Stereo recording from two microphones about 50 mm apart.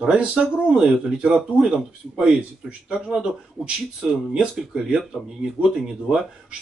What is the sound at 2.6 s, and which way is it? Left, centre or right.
Speech, centre.